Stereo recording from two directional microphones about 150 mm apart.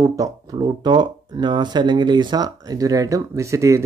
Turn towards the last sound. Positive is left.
turn(degrees=-20)  # may be behind; listen again after turning